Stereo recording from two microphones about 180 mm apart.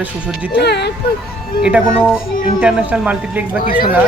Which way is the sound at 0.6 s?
65° left (ahead or behind).